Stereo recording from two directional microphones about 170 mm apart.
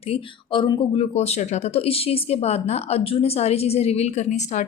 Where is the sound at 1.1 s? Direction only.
40° left (ahead or behind).